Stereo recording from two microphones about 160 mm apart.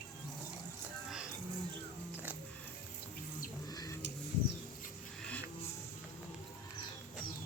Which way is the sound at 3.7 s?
25° left (ahead or behind).